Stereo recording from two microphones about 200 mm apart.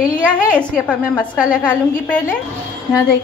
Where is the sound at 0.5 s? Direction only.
5° left (ahead or behind).